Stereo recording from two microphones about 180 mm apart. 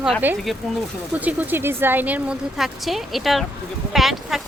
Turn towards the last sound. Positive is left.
turn(degrees=0)  # may be behind; listen again after turning